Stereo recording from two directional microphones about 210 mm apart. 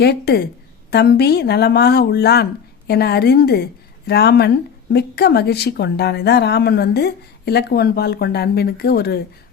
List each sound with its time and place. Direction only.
0.0 s speech: 50° left (ahead or behind)